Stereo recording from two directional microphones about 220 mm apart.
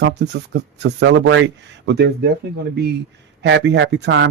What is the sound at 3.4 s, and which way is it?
Speech, 55° right (ahead or behind).